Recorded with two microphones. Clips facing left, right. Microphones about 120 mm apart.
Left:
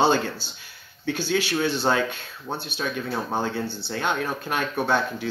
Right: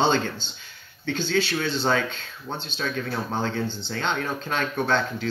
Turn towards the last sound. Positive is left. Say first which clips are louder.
# left 1 dB
turn(degrees=10)  # may be behind; listen again after turning